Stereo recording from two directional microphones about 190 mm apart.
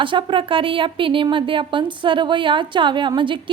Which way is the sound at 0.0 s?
25° right (ahead or behind).